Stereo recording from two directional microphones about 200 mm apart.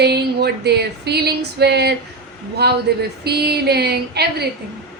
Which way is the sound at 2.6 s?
55° right (ahead or behind).